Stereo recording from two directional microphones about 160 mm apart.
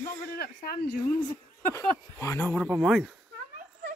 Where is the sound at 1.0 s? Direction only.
15° left (ahead or behind).